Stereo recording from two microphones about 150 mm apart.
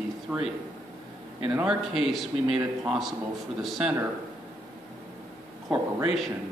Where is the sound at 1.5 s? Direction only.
5° right (ahead or behind).